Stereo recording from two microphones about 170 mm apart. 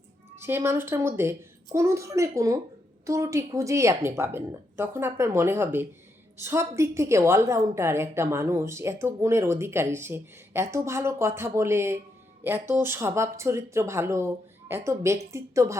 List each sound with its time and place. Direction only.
0.3 s a woman's voice: 15° right (ahead or behind)